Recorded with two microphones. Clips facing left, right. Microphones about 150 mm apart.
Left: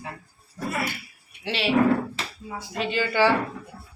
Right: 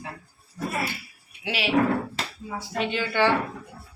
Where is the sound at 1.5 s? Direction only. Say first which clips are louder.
Left 2 dB; 5° right (ahead or behind).